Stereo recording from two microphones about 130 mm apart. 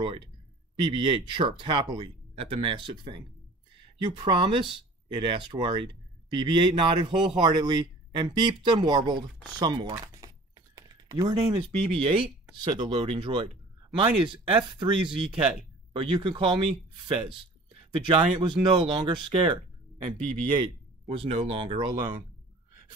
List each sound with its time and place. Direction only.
0.7 s a man's voice: 35° right (ahead or behind)
11.9 s speech: 45° right (ahead or behind)
12.6 s speech: 35° right (ahead or behind)